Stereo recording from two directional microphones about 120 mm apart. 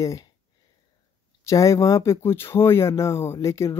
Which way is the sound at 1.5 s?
25° left (ahead or behind).